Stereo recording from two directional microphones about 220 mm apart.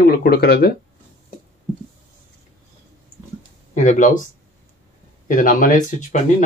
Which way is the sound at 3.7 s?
35° left (ahead or behind).